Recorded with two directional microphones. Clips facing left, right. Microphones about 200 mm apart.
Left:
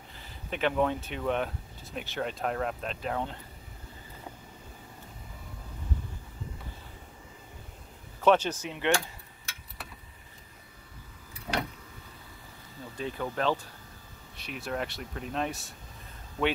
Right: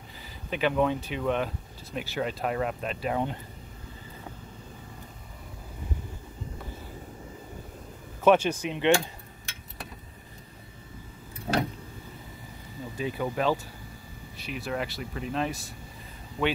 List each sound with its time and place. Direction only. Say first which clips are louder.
0.2 s speech: right 2 dB; 5° right (ahead or behind)
8.2 s speech: right 3 dB; 10° right (ahead or behind)
11.5 s vehicle: right 5 dB; 30° right (ahead or behind)
12.8 s speech: right 4 dB; 10° right (ahead or behind)
16.4 s speech: right 1 dB; 15° right (ahead or behind)